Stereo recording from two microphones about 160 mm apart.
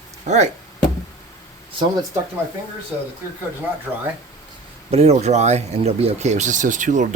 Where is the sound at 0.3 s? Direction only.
45° right (ahead or behind).